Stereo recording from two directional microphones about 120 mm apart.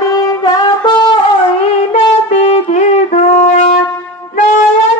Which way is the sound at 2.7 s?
75° left (ahead or behind).